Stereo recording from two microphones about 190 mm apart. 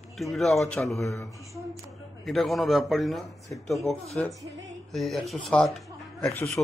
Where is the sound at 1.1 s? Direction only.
15° left (ahead or behind).